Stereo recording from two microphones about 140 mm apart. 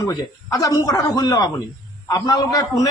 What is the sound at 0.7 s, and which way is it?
A man's voice, 25° left (ahead or behind).